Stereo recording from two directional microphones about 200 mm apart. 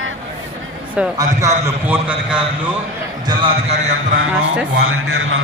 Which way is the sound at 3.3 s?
25° right (ahead or behind).